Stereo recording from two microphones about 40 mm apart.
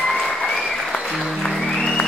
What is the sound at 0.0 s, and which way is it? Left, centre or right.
Applause, centre.